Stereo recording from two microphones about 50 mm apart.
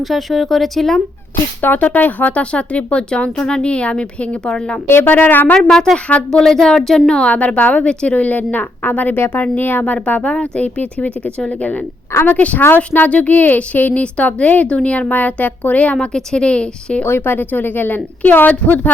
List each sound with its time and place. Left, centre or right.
0.0 s speech: centre
1.6 s speech: left; by 4.8 s centre
4.9 s a woman's voice: left
6.3 s a woman's voice: centre; by 12.6 s left
12.6 s a woman's voice: left
16.0 s speech: centre
17.0 s a woman's voice: left